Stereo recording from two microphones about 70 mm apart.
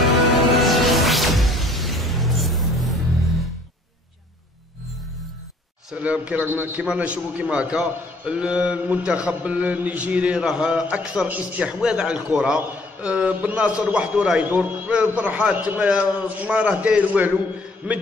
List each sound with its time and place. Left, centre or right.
0.0 s music: centre
5.9 s a man's voice: centre